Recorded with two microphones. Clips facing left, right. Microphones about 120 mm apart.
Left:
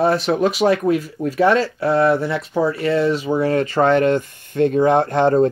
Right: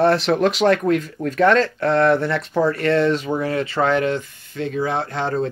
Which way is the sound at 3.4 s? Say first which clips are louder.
Left 4 dB; 40° left (ahead or behind).